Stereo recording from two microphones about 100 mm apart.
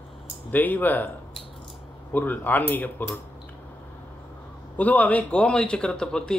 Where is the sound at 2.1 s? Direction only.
15° left (ahead or behind).